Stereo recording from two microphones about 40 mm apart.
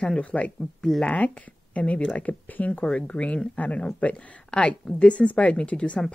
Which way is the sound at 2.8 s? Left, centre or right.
Left.